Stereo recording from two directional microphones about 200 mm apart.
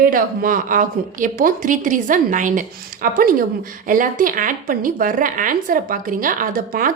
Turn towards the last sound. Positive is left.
turn(degrees=-45)  # may be behind; listen again after turning